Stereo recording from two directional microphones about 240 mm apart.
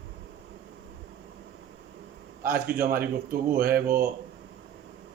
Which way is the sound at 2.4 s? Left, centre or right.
Right.